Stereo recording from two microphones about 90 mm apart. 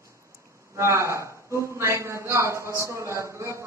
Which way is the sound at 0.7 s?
30° right (ahead or behind).